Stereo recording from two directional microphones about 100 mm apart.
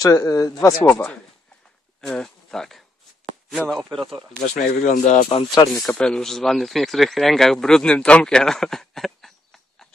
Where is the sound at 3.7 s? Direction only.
Centre (ahead or behind).